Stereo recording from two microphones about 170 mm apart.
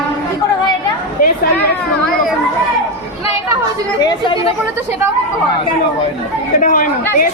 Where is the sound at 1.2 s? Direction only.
55° left (ahead or behind).